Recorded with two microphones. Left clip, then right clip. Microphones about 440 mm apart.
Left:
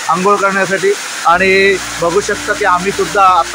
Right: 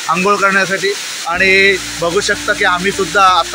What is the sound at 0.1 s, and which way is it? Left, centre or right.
Speech, right.